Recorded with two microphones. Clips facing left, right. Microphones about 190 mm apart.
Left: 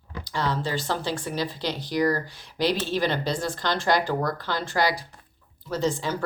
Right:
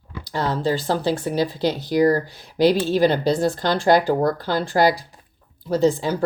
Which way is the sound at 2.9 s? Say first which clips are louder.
Right 8 dB; 40° right (ahead or behind).